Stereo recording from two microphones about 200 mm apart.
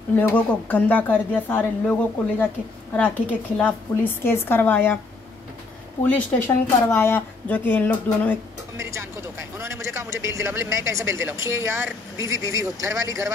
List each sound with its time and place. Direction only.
0.1 s speech: 10° left (ahead or behind)
3.5 s speech: 10° left (ahead or behind)
6.0 s speech: 10° left (ahead or behind)
8.7 s a man's voice: 15° right (ahead or behind)